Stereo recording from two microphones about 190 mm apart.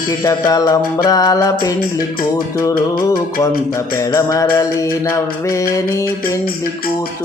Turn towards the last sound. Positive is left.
turn(degrees=15)  # may be behind; listen again after turning